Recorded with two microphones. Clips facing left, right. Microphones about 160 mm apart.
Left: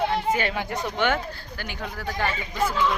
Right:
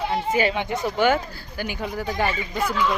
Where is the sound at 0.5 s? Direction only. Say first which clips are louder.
Right 4 dB; centre (ahead or behind).